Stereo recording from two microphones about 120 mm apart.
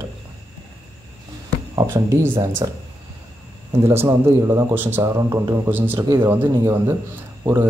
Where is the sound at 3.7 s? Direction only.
20° right (ahead or behind).